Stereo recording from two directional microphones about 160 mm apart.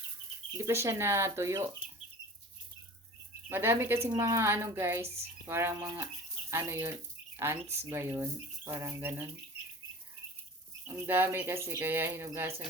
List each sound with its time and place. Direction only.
0.5 s speech: 20° right (ahead or behind)
3.5 s speech: 15° right (ahead or behind)
10.8 s speech: 10° right (ahead or behind)